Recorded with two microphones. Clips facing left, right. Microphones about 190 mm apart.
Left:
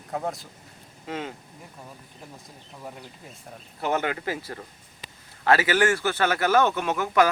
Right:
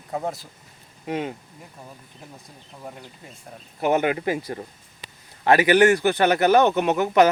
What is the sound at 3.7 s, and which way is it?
Speech, 15° right (ahead or behind).